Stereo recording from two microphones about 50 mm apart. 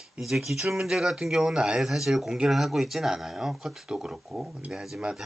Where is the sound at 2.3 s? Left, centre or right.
Centre.